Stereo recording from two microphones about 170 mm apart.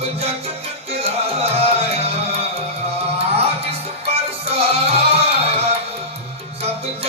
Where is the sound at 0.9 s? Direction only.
35° right (ahead or behind).